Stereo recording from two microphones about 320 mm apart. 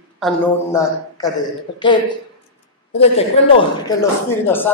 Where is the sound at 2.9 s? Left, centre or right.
Centre.